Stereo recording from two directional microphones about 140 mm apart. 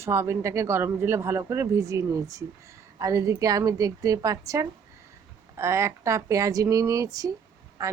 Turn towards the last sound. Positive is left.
turn(degrees=-20)  # may be behind; listen again after turning